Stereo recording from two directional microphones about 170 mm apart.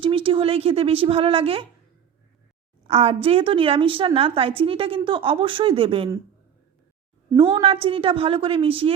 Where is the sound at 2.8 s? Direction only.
35° right (ahead or behind).